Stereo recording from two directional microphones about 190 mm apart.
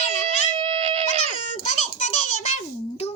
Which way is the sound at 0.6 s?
30° right (ahead or behind).